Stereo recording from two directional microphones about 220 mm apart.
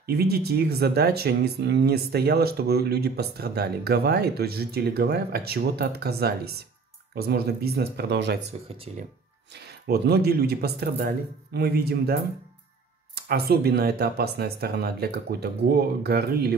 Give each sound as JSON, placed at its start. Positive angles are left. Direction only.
{"t": 0.0, "sound": "speech", "side_deg": -45}
{"t": 8.5, "sound": "speech", "side_deg": -25}
{"t": 9.5, "sound": "speech", "side_deg": -45}